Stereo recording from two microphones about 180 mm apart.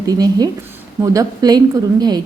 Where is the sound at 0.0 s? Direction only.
20° right (ahead or behind).